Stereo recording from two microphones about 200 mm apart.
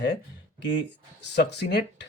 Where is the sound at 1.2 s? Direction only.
60° left (ahead or behind).